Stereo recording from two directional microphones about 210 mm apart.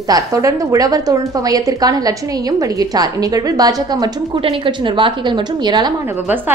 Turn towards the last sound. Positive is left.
turn(degrees=-20)  # may be behind; listen again after turning